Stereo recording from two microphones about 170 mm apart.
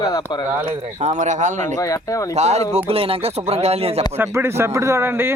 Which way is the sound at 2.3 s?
40° right (ahead or behind).